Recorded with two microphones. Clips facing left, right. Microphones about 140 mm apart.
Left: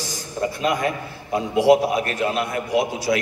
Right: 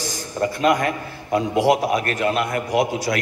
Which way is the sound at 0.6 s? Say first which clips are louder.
Right 4 dB; 50° right (ahead or behind).